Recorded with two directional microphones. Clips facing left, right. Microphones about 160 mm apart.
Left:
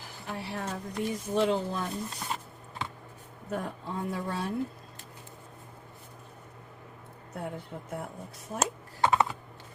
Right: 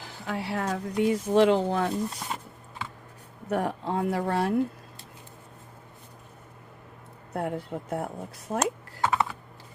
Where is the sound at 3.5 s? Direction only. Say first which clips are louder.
Right 7 dB; 80° right.